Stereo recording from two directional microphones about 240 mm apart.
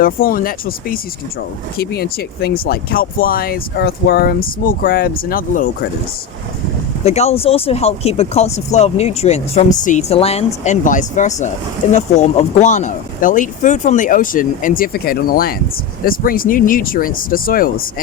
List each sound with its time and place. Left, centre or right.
0.0 s speech: left
7.0 s speech: left